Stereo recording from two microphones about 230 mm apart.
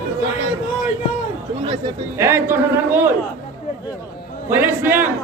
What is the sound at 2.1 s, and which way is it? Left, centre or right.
Speech, centre.